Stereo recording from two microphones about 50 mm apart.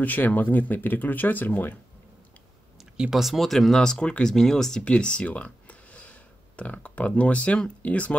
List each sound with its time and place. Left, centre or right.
0.0 s speech: left
3.0 s speech: centre; by 8.2 s left